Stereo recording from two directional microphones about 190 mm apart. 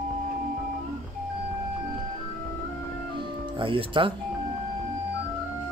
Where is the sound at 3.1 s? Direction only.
25° right (ahead or behind).